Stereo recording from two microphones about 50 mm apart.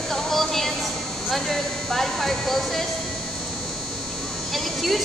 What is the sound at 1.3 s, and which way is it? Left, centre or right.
A woman's voice, centre.